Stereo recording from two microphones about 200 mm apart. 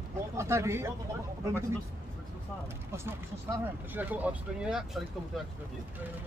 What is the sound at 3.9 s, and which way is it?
Speech, 10° right (ahead or behind).